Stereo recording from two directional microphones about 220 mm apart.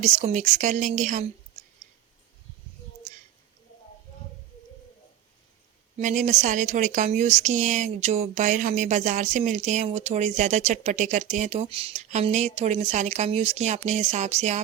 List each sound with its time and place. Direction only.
0.0 s speech: 30° right (ahead or behind)
6.0 s speech: 35° right (ahead or behind)